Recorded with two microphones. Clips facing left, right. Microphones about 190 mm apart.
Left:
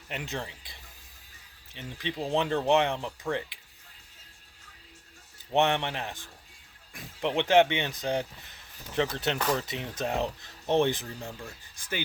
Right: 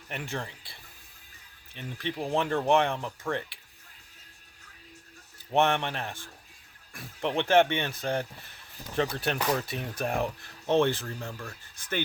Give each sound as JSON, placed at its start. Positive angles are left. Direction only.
{"t": 0.1, "sound": "speech", "side_deg": 20}
{"t": 5.5, "sound": "speech", "side_deg": 20}